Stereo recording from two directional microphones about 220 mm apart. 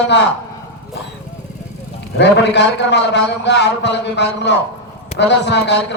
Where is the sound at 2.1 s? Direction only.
50° left (ahead or behind).